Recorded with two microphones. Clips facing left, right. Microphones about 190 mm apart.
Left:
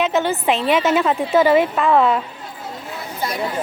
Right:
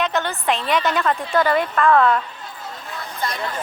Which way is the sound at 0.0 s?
5° left (ahead or behind).